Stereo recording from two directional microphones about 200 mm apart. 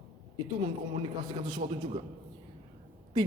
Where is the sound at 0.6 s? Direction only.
25° right (ahead or behind).